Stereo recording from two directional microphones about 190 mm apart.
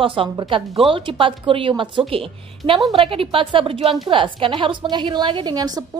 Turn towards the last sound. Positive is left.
turn(degrees=-20)  # may be behind; listen again after turning